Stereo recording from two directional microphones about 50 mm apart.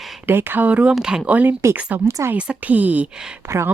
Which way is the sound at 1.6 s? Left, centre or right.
Right.